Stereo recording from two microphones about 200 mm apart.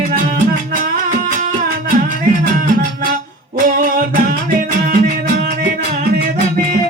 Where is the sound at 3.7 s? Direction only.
45° right (ahead or behind).